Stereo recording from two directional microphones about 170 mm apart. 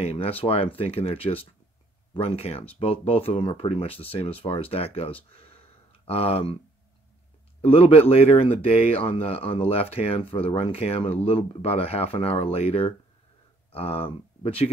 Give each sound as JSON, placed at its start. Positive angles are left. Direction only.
{"t": 0.0, "sound": "speech", "side_deg": 35}
{"t": 7.6, "sound": "speech", "side_deg": 35}